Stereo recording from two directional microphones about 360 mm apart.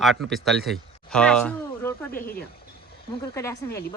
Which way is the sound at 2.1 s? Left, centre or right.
Left.